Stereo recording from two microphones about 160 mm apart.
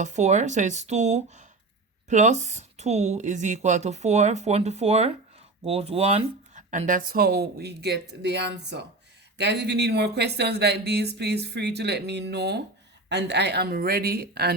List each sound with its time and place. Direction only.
0.0 s speech: 45° right (ahead or behind); by 14.5 s 75° right (ahead or behind)